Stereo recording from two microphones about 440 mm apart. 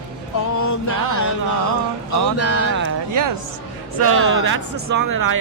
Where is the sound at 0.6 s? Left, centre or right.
Left.